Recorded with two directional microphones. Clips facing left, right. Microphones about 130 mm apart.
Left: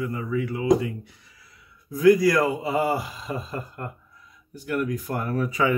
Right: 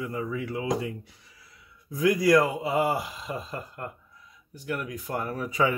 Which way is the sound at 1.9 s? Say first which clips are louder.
Left 3 dB; 20° right (ahead or behind).